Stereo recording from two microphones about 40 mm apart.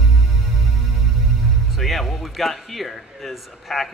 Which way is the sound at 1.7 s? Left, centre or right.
Centre.